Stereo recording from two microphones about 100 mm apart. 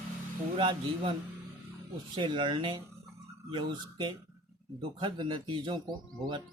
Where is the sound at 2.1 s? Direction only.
55° right (ahead or behind).